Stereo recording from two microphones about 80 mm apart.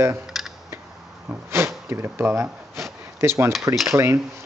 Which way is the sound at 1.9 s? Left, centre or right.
Right.